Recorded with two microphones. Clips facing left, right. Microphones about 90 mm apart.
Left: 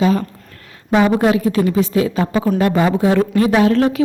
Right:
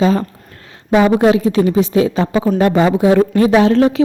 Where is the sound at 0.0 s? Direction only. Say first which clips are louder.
Right 2 dB; 30° right (ahead or behind).